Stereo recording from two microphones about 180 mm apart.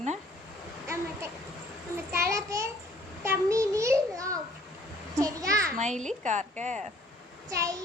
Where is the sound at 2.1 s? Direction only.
15° right (ahead or behind).